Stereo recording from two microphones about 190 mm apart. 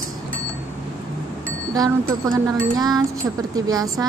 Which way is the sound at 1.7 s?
20° right (ahead or behind).